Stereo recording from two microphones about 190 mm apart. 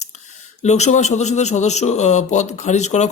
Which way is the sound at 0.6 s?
35° left (ahead or behind).